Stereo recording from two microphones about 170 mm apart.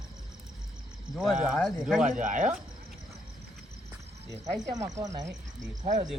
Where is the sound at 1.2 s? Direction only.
5° right (ahead or behind).